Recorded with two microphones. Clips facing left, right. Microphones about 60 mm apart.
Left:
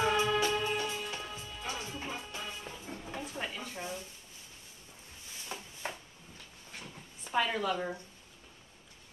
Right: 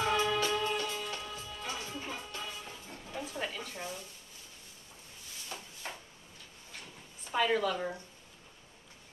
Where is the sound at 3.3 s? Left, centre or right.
Centre.